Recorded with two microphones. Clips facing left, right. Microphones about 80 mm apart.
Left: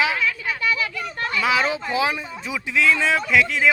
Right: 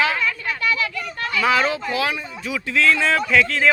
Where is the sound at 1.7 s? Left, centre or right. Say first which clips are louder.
Even; left.